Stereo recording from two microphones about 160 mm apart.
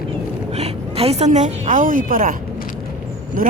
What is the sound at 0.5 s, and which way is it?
A woman's voice, 40° right (ahead or behind).